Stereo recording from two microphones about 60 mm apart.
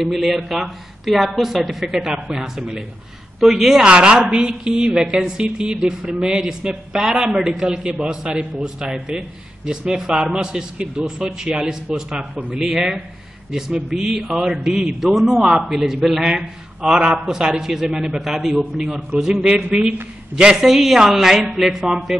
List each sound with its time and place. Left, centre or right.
0.0 s a man's voice: centre
12.2 s a man's voice: right
12.5 s a man's voice: centre
20.5 s speech: centre